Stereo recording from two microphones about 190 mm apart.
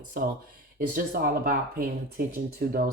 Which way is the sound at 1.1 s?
50° right (ahead or behind).